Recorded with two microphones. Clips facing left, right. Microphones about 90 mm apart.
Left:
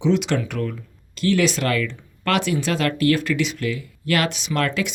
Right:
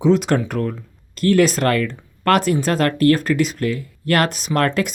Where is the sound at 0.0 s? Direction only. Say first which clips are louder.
Right 4 dB; 45° right (ahead or behind).